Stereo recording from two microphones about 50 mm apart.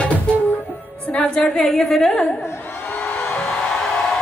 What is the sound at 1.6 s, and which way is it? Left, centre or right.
Speech, centre.